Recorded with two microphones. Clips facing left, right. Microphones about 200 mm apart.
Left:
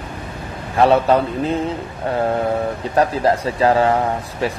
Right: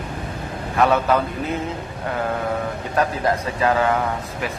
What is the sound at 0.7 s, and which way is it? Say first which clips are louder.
Speech: left 4 dB; 30° left (ahead or behind).